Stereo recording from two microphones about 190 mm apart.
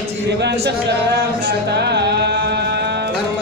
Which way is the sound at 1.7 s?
60° right (ahead or behind).